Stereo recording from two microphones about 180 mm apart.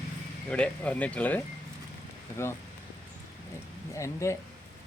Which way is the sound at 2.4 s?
15° left (ahead or behind).